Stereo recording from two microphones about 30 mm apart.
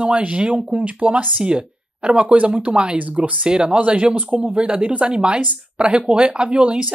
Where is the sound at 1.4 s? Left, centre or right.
Right.